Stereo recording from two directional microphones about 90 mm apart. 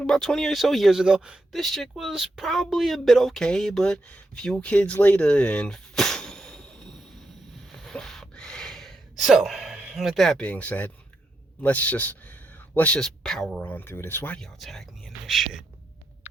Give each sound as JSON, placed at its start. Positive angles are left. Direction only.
{"t": 0.0, "sound": "speech", "side_deg": 5}
{"t": 1.5, "sound": "speech", "side_deg": 0}
{"t": 7.7, "sound": "a sound", "side_deg": 5}
{"t": 10.0, "sound": "speech", "side_deg": 0}
{"t": 13.0, "sound": "speech", "side_deg": 5}
{"t": 13.6, "sound": "speech", "side_deg": 20}
{"t": 14.3, "sound": "speech", "side_deg": 5}